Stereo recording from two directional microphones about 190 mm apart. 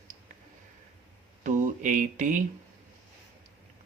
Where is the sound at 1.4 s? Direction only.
40° right (ahead or behind).